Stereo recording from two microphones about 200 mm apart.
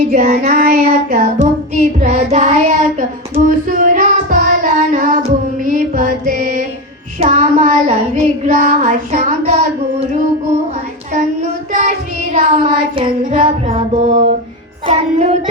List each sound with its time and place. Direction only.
0.1 s child singing: 35° right (ahead or behind)
0.4 s child singing: 45° right (ahead or behind)
0.9 s child singing: 35° right (ahead or behind)
5.7 s music: 45° right (ahead or behind)
7.2 s child singing: 35° right (ahead or behind)
11.7 s child singing: 35° right (ahead or behind)
14.8 s music: 35° right (ahead or behind)